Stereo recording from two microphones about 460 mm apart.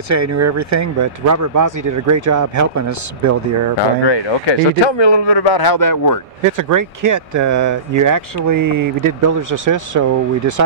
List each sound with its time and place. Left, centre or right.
0.1 s speech: right
4.0 s speech: left
6.5 s speech: right